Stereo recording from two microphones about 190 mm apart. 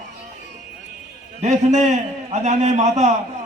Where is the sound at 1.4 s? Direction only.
35° right (ahead or behind).